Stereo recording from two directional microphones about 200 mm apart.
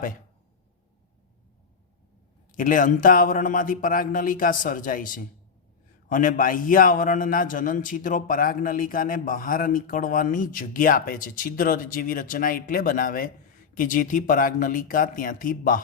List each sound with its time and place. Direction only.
2.6 s a man's voice: 40° left (ahead or behind)